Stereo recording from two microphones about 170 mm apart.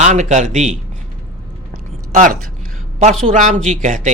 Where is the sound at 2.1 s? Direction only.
50° right (ahead or behind).